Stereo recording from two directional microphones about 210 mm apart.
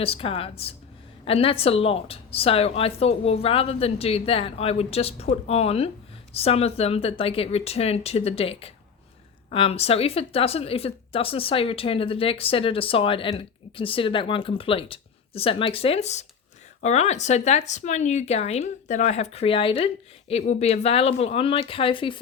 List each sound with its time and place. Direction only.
0.0 s speech: 25° left (ahead or behind)